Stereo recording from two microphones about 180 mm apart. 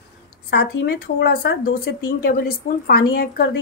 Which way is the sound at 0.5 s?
70° left (ahead or behind).